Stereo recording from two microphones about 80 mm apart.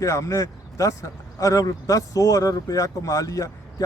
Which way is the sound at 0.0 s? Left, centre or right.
Left.